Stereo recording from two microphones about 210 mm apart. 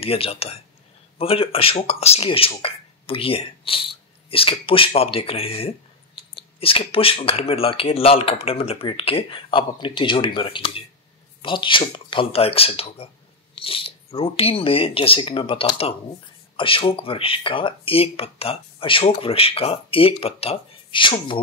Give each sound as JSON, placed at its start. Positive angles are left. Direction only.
{"t": 0.0, "sound": "speech", "side_deg": 25}